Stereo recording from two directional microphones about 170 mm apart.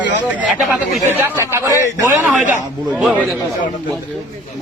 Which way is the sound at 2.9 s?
5° right (ahead or behind).